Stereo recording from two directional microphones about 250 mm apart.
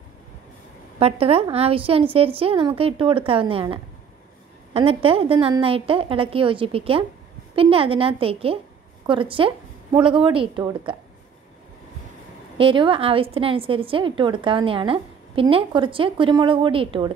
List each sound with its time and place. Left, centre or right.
0.9 s a woman's voice: right
12.5 s a woman's voice: centre